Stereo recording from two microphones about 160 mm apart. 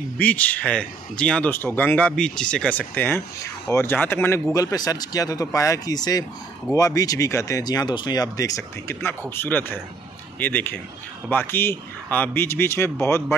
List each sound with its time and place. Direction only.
0.2 s speech: 10° left (ahead or behind)